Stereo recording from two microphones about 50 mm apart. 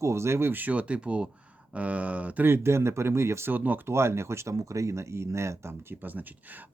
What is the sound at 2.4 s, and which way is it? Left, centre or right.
Speech, right.